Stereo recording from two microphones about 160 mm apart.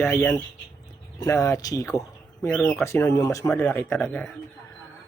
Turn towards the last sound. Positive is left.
turn(degrees=5)  # may be behind; listen again after turning